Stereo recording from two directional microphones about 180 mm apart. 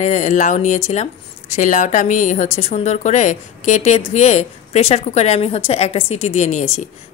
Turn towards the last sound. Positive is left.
turn(degrees=40)  # may be behind; listen again after turning